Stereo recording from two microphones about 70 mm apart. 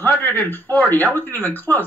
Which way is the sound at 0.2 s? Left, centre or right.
Left.